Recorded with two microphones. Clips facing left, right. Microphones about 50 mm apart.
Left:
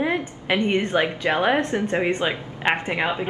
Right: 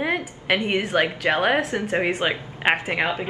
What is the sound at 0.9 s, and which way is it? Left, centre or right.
A woman's voice, right.